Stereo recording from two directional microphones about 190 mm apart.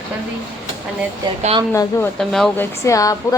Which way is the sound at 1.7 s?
15° left (ahead or behind).